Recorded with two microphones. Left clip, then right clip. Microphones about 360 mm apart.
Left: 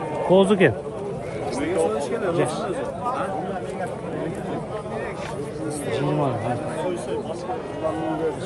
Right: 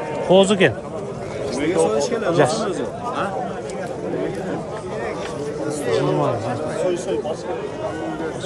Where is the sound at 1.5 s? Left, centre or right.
Right.